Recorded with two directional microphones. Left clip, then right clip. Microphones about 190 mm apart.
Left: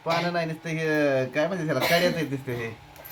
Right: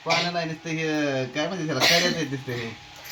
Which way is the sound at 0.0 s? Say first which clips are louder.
Right 1 dB; 15° left (ahead or behind).